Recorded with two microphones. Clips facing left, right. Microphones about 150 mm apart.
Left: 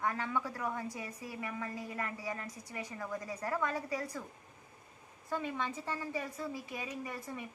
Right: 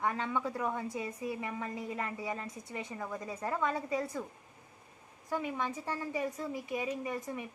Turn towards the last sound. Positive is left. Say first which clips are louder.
# right 4 dB
turn(degrees=-20)  # may be behind; listen again after turning